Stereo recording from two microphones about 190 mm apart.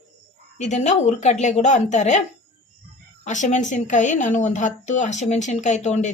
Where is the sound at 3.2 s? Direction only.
40° left (ahead or behind).